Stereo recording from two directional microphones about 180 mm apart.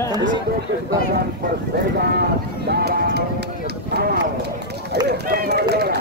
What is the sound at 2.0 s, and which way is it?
Speech, 65° right (ahead or behind).